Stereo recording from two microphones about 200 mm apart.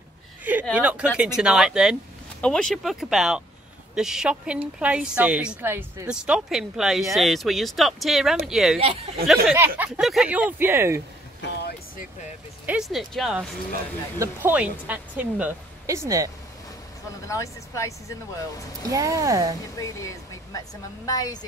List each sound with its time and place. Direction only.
0.4 s a sound: 10° right (ahead or behind)
0.7 s a woman's voice: 5° right (ahead or behind)
8.7 s speech: 30° right (ahead or behind)
9.3 s a woman's voice: 5° right (ahead or behind)
11.4 s vehicle: 55° left (ahead or behind)
12.6 s a woman's voice: 5° right (ahead or behind)
14.1 s speech: 10° right (ahead or behind)
17.3 s speech: 15° left (ahead or behind)
18.9 s speech: 15° right (ahead or behind)
19.8 s speech: 15° left (ahead or behind)